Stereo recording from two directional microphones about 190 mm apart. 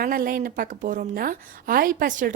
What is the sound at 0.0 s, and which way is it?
A woman's voice, 50° right (ahead or behind).